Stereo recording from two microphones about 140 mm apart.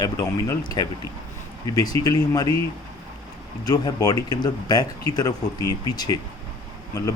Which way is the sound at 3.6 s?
25° left (ahead or behind).